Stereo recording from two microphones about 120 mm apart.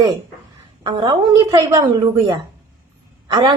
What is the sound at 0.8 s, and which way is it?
A woman's voice, 35° right (ahead or behind).